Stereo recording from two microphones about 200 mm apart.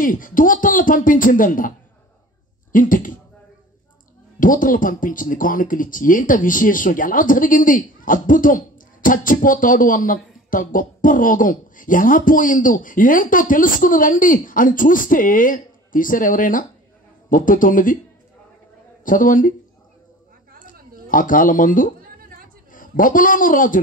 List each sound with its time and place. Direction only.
0.0 s speech: 45° left (ahead or behind)
2.7 s speech: 40° left (ahead or behind)
4.4 s speech: 40° left (ahead or behind)
19.0 s speech: 40° left (ahead or behind)
21.1 s a man's voice: 40° left (ahead or behind)